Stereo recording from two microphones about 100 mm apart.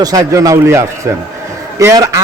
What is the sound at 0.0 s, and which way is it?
A man's voice, 40° right (ahead or behind).